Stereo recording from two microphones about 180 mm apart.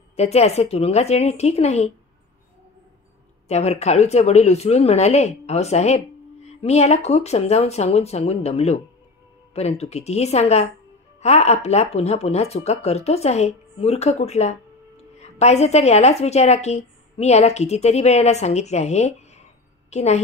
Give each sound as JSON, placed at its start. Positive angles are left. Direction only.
{"t": 0.1, "sound": "speech", "side_deg": 35}
{"t": 3.4, "sound": "a woman's voice", "side_deg": 35}